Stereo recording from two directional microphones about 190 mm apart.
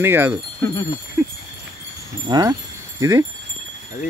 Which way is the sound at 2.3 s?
20° right (ahead or behind).